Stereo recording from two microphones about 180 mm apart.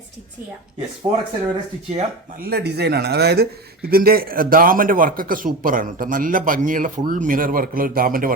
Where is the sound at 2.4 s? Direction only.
65° right (ahead or behind).